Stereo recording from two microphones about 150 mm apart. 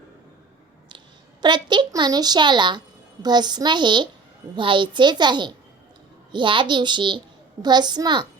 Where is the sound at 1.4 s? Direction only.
30° right (ahead or behind).